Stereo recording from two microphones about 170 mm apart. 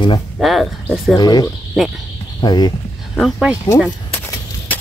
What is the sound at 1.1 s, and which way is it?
Speech, 25° left (ahead or behind).